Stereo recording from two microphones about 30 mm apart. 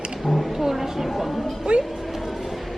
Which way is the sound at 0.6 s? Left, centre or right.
Centre.